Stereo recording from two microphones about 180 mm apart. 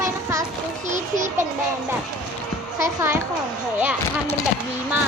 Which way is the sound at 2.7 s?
15° right (ahead or behind).